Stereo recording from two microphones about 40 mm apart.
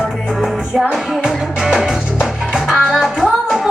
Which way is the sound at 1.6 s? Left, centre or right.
Centre.